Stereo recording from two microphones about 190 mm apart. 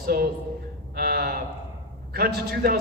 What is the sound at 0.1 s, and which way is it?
A man's voice, 55° right (ahead or behind).